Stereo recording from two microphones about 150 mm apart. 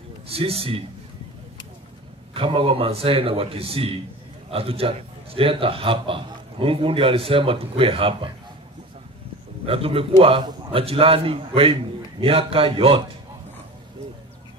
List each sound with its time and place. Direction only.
0.3 s a man's voice: 40° right (ahead or behind)
2.3 s a man's voice: 35° right (ahead or behind)
9.7 s a man's voice: 40° right (ahead or behind)